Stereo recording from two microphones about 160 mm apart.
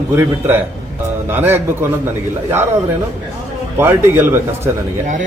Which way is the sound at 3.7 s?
15° right (ahead or behind).